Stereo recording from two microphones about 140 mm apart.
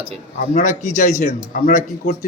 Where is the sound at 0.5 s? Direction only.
65° left (ahead or behind).